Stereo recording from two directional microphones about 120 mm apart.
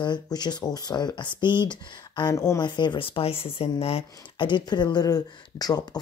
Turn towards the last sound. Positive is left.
turn(degrees=35)  # may be behind; listen again after turning